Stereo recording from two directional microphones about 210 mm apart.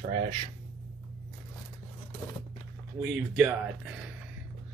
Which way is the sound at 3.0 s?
5° right (ahead or behind).